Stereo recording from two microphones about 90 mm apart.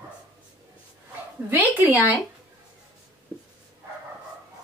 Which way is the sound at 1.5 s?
20° right (ahead or behind).